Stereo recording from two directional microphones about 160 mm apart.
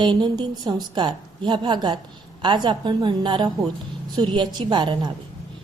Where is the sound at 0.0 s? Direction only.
25° right (ahead or behind).